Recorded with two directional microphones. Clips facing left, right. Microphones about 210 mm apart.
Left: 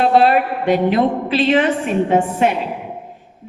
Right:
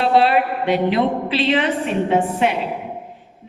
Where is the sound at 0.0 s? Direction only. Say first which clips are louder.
Left 2 dB; 45° left (ahead or behind).